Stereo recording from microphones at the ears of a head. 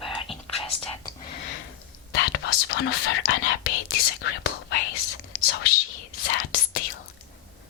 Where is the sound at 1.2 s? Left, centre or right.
Left.